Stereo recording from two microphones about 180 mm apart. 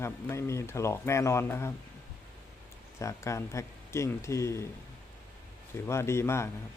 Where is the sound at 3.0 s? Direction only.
15° left (ahead or behind).